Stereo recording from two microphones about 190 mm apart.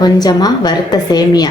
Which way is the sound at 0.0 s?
20° left (ahead or behind).